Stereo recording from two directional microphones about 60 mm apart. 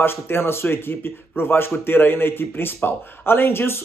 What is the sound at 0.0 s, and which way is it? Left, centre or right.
Speech, left.